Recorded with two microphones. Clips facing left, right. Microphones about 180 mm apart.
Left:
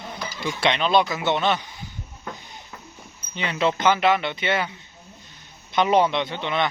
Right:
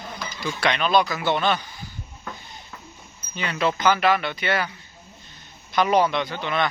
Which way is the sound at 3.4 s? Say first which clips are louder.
Left 1 dB; 25° left (ahead or behind).